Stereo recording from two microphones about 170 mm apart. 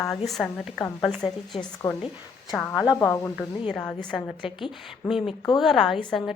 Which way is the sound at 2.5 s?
Centre (ahead or behind).